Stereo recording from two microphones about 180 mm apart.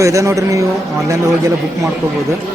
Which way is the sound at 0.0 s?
15° right (ahead or behind).